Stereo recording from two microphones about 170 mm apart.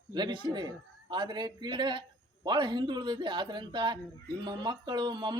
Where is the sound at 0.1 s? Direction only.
25° right (ahead or behind).